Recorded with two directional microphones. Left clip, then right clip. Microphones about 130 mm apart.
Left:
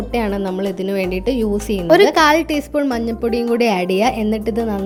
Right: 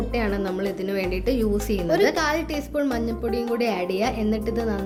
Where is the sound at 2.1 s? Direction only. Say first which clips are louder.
Left 10 dB; 75° left (ahead or behind).